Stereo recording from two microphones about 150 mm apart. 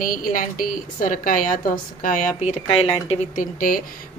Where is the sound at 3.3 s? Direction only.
65° left (ahead or behind).